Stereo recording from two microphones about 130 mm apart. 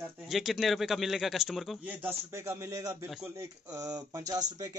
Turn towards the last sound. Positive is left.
turn(degrees=-25)  # may be behind; listen again after turning